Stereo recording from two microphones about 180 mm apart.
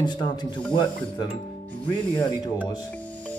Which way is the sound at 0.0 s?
25° left (ahead or behind).